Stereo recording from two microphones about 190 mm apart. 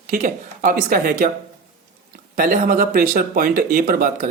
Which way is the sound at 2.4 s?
45° right (ahead or behind).